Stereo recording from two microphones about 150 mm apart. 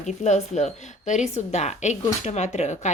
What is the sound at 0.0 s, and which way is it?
A woman's voice, 50° left (ahead or behind).